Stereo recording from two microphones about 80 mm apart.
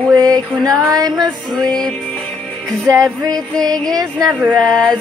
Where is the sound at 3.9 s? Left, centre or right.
Right.